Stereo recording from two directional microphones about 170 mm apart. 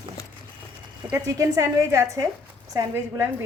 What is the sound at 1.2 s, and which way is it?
A woman's voice, 20° right (ahead or behind).